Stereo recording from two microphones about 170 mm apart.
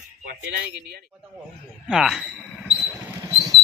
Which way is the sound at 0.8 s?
65° right (ahead or behind).